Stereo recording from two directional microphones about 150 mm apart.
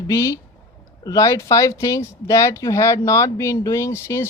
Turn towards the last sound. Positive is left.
turn(degrees=15)  # may be behind; listen again after turning